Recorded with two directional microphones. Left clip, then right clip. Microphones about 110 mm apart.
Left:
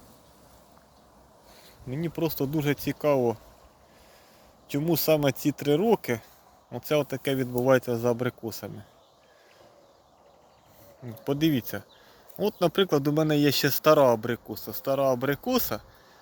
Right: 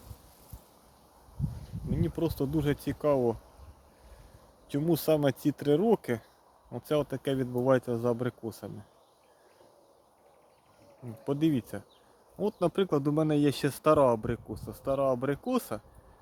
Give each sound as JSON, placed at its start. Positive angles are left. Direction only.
{"t": 1.9, "sound": "speech", "side_deg": -10}
{"t": 4.7, "sound": "speech", "side_deg": -15}
{"t": 11.0, "sound": "speech", "side_deg": 0}